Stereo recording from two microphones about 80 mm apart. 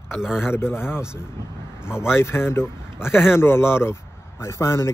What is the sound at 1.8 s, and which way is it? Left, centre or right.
Speech, left.